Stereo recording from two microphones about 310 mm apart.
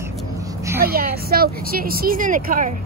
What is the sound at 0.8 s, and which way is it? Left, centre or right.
A woman's voice, right.